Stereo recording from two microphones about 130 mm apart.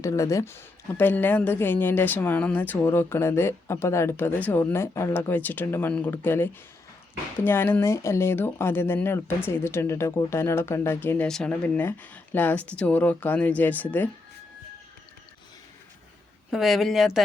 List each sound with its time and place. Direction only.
0.0 s a woman's voice: 25° left (ahead or behind)
11.3 s a woman's voice: 5° left (ahead or behind)
16.5 s speech: centre (ahead or behind)